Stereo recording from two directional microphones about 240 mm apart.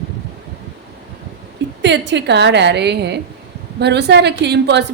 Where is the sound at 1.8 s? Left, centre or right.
Right.